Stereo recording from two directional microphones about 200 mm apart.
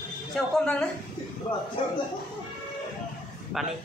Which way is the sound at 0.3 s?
5° left (ahead or behind).